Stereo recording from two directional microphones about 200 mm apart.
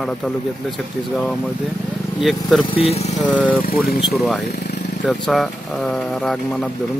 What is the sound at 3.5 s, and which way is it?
Speech, 45° left (ahead or behind).